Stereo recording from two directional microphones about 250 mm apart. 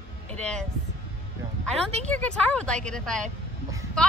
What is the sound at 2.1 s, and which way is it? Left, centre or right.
A woman's voice, centre.